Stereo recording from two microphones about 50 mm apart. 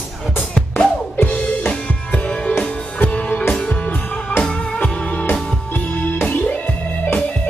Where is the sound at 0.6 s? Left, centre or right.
Left.